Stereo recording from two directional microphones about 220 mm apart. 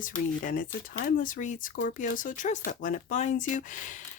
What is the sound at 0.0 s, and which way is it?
Speech, 40° left (ahead or behind).